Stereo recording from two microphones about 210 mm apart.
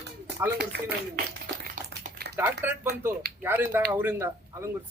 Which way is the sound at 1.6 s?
50° right (ahead or behind).